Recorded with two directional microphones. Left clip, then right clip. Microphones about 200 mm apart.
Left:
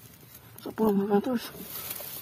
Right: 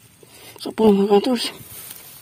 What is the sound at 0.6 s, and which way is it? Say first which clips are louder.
Speech: right 11 dB; 40° right (ahead or behind).